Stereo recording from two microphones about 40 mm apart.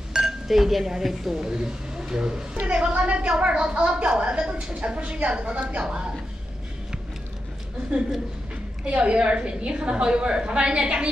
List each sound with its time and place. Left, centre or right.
0.1 s a woman's voice: centre; by 6.0 s right
9.0 s a woman's voice: right